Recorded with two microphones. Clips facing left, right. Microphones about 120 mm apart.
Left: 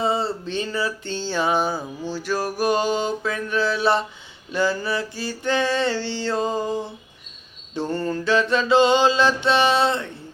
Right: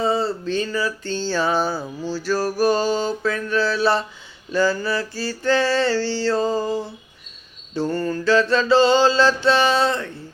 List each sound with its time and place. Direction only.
0.0 s music: 25° left (ahead or behind)
7.8 s music: 25° left (ahead or behind)